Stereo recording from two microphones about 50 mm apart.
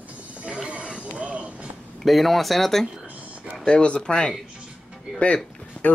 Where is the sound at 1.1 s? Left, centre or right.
Right.